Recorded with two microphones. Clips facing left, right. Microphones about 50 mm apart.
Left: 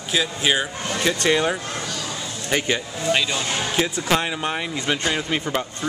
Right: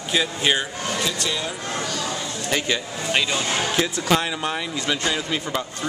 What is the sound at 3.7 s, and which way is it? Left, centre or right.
Speech, centre.